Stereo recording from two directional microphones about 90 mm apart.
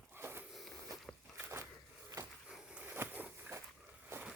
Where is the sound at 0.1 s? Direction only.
25° right (ahead or behind).